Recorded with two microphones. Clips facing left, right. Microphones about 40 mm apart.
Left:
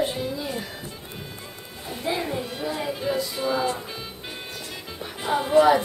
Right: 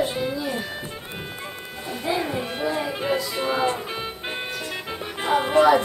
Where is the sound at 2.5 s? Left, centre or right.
Right.